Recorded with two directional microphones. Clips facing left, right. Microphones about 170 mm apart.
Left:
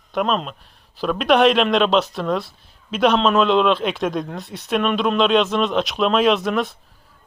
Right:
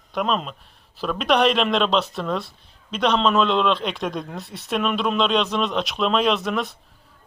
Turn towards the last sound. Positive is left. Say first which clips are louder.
# left 4 dB
turn(degrees=0)  # may be behind; listen again after turning